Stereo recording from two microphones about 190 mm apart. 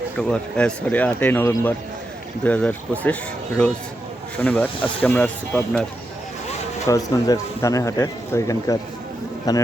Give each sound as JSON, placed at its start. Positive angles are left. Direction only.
{"t": 0.2, "sound": "speech", "side_deg": 5}
{"t": 6.8, "sound": "speech", "side_deg": 15}